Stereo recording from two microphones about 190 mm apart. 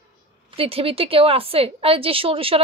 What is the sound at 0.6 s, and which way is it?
A woman's voice, 30° right (ahead or behind).